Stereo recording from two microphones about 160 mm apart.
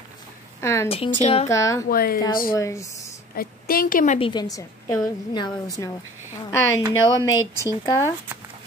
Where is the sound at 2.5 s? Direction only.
20° left (ahead or behind).